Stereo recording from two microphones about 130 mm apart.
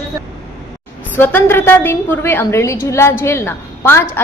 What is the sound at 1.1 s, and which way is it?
A woman's voice, 15° left (ahead or behind).